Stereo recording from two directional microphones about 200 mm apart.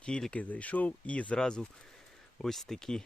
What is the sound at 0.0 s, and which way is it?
Speech, 5° left (ahead or behind).